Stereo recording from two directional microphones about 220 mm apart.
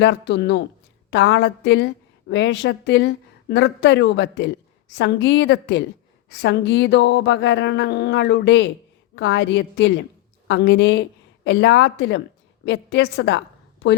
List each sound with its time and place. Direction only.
0.0 s speech: 50° left (ahead or behind)